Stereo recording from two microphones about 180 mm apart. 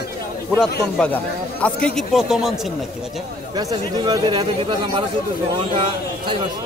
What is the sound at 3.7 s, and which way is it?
Speech, 20° right (ahead or behind).